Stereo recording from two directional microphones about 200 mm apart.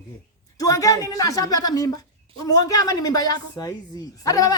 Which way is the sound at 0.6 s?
15° left (ahead or behind).